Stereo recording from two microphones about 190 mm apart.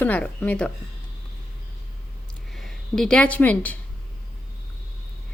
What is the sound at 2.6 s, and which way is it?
Speech, 5° left (ahead or behind).